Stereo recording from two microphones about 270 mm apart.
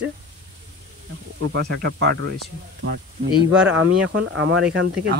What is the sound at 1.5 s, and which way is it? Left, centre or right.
Speech, right.